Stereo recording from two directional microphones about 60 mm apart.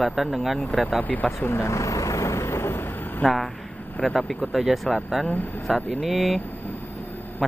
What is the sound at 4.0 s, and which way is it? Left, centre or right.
Speech, centre.